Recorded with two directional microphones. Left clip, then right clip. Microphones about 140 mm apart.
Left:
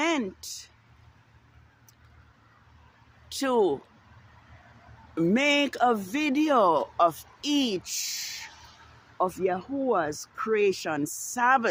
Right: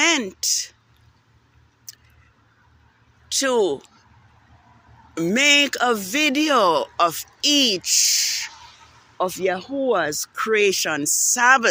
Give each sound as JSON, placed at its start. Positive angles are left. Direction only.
{"t": 0.0, "sound": "speech", "side_deg": -10}
{"t": 3.2, "sound": "speech", "side_deg": 5}
{"t": 5.1, "sound": "speech", "side_deg": 5}